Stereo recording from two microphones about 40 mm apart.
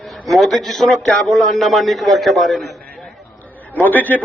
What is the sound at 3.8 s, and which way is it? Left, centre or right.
Speech, left.